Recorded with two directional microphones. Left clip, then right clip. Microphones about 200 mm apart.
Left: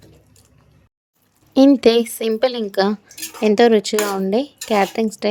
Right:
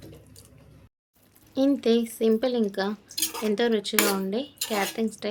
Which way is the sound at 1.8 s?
40° left (ahead or behind).